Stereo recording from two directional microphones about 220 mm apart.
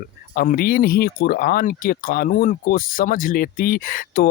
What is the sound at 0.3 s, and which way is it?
Speech, 45° left (ahead or behind).